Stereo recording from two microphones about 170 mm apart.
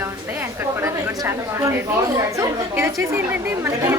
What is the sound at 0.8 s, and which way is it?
A woman's voice, 15° right (ahead or behind).